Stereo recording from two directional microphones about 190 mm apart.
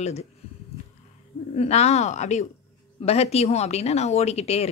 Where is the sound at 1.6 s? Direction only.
35° left (ahead or behind).